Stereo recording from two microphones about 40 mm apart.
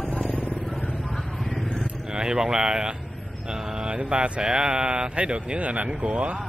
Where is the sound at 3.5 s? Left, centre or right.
Right.